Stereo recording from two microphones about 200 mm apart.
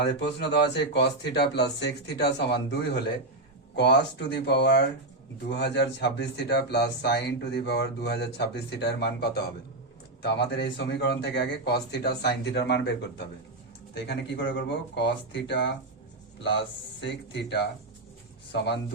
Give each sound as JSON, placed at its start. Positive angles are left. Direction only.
{"t": 0.0, "sound": "speech", "side_deg": 60}
{"t": 17.0, "sound": "speech", "side_deg": 55}